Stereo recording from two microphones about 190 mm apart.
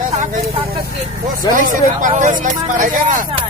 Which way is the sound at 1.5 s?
45° right (ahead or behind).